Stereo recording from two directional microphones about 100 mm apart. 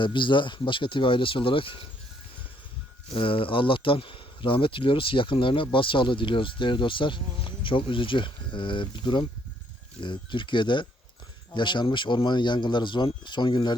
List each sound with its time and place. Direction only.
0.0 s speech: 55° left (ahead or behind)
3.1 s speech: 60° left (ahead or behind)